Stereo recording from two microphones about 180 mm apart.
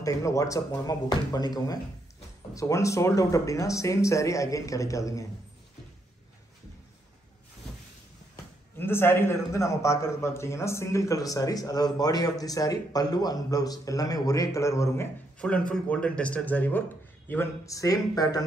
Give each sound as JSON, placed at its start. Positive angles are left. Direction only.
{"t": 0.0, "sound": "a man's voice", "side_deg": 20}
{"t": 8.7, "sound": "a man's voice", "side_deg": 10}
{"t": 15.3, "sound": "a man's voice", "side_deg": 5}